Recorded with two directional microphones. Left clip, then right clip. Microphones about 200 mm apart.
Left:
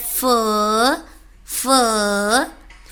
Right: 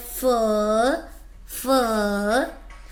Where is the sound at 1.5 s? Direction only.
35° left (ahead or behind).